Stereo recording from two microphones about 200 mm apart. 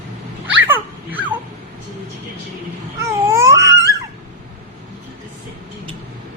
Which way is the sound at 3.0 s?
15° right (ahead or behind).